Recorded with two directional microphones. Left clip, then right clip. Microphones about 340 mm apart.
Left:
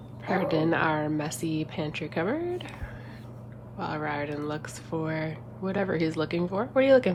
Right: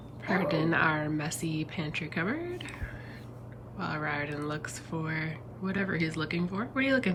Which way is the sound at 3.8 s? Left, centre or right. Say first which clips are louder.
Left 2 dB; centre.